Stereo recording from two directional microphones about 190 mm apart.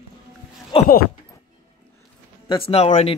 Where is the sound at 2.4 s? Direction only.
30° left (ahead or behind).